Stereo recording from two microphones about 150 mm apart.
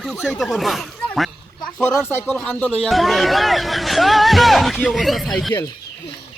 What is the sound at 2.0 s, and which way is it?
Speech, 15° left (ahead or behind).